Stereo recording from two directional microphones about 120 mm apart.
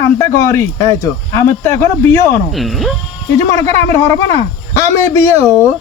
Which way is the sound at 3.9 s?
25° left (ahead or behind).